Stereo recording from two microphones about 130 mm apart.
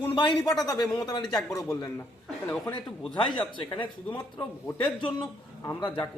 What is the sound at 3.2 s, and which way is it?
Speech, 40° left (ahead or behind).